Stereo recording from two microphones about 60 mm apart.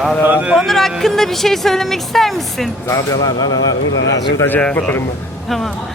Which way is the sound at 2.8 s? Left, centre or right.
Left.